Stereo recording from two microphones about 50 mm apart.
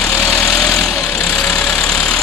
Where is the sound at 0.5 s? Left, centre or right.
Centre.